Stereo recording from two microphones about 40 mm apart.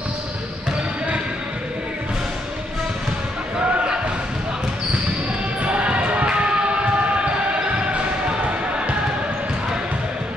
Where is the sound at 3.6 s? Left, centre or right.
Right.